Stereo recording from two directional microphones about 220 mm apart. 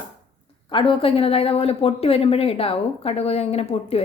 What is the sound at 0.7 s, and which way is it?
Speech, 25° left (ahead or behind).